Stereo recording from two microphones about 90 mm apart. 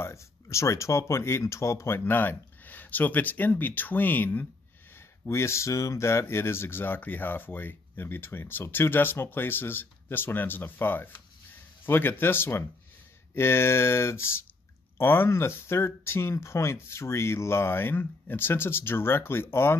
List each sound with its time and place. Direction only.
0.0 s speech: 35° left (ahead or behind)